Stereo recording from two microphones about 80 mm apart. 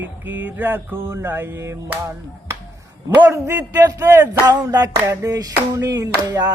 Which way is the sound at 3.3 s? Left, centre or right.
Right.